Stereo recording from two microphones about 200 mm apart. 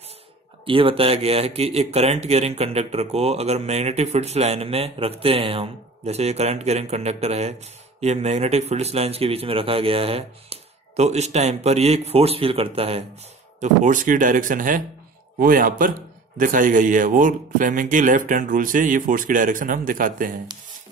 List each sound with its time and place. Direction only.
0.7 s speech: 25° right (ahead or behind)
13.6 s a man's voice: 40° right (ahead or behind)